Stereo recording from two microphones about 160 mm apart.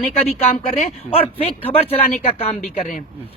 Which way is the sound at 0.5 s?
45° left (ahead or behind).